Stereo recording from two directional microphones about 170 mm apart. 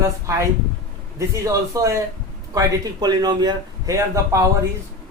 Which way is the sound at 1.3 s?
20° right (ahead or behind).